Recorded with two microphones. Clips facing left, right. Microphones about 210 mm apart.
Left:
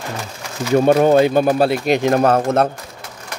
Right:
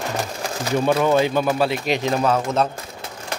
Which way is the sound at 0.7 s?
45° left (ahead or behind).